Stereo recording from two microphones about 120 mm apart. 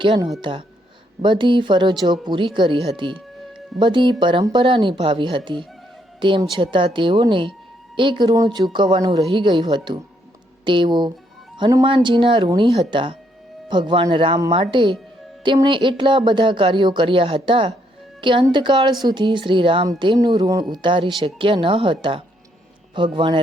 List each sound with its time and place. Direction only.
0.4 s a woman's voice: 40° right (ahead or behind)